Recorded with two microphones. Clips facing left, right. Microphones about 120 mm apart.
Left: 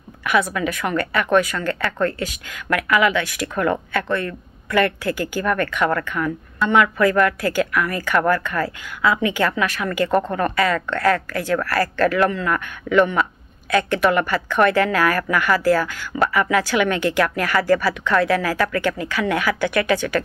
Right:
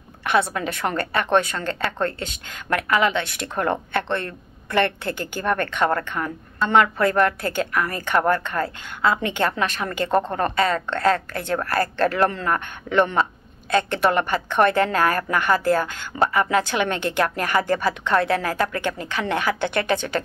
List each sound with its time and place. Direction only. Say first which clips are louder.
0.2 s speech: left 1 dB; 30° right (ahead or behind)